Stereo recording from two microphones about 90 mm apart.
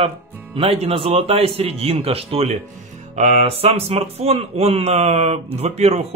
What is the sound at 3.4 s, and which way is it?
Speech, 90° right.